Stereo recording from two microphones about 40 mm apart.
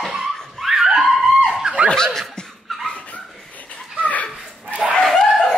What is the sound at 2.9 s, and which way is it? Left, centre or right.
Dog, left.